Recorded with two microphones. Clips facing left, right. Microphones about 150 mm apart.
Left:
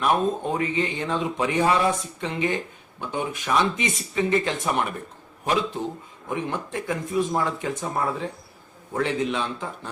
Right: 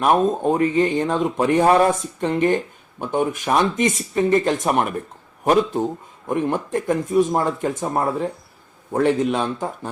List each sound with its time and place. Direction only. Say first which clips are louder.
0.0 s speech: right 5 dB; 40° right (ahead or behind)
6.2 s speech: right 7 dB; 45° right (ahead or behind)